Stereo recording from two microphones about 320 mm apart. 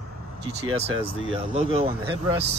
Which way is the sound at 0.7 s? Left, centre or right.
Centre.